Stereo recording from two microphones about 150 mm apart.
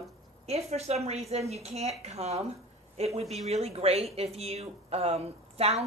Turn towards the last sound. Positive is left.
turn(degrees=-45)  # may be behind; listen again after turning